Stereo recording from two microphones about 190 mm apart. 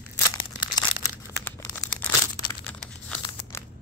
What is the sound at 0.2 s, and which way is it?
Crumpling, 20° left (ahead or behind).